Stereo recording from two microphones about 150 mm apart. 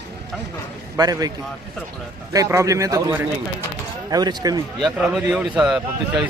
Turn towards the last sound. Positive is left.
turn(degrees=-5)  # may be behind; listen again after turning